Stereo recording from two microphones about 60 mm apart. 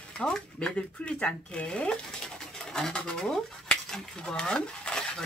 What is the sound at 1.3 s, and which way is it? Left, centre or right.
Speech, centre.